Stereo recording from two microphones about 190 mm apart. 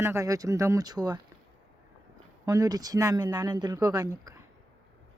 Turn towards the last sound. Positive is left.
turn(degrees=-20)  # may be behind; listen again after turning